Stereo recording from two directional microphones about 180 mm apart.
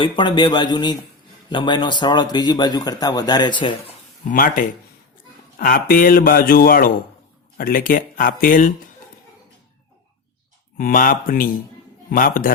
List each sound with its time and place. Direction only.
0.0 s a man's voice: 25° left (ahead or behind)
4.3 s speech: 50° left (ahead or behind)
10.8 s speech: 50° left (ahead or behind)